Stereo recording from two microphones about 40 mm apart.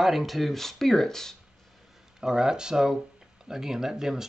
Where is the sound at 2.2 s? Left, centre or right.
Centre.